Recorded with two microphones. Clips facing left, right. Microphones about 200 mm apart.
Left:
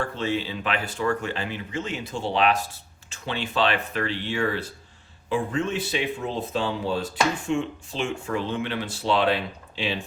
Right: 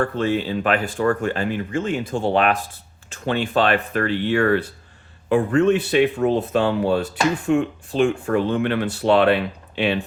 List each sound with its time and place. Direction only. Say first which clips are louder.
0.0 s speech: right 6 dB; 55° right (ahead or behind)